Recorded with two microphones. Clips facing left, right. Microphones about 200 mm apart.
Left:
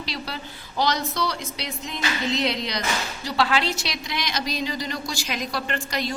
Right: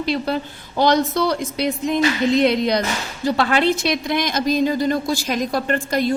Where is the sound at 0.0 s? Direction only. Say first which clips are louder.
Right 11 dB; 50° right (ahead or behind).